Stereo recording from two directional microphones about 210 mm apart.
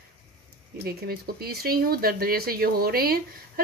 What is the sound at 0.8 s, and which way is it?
Speech, 50° right (ahead or behind).